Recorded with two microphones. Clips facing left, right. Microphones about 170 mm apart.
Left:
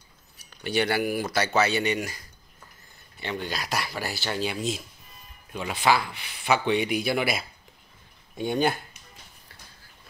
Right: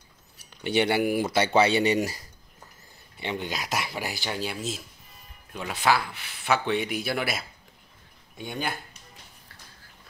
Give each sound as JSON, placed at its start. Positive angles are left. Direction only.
{"t": 0.6, "sound": "speech", "side_deg": -20}
{"t": 3.2, "sound": "speech", "side_deg": -20}
{"t": 8.5, "sound": "speech", "side_deg": 30}